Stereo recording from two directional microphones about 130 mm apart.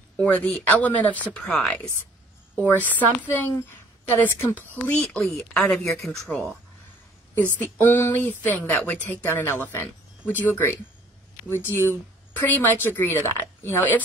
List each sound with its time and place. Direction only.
0.2 s speech: 10° left (ahead or behind)
2.5 s speech: 15° left (ahead or behind)
7.5 s speech: 15° left (ahead or behind)